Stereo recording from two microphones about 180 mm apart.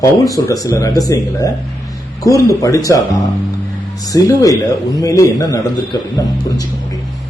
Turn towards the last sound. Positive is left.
turn(degrees=20)  # may be behind; listen again after turning